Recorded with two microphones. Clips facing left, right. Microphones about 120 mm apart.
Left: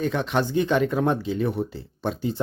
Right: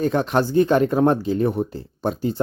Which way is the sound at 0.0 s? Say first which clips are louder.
Right 4 dB; 40° right (ahead or behind).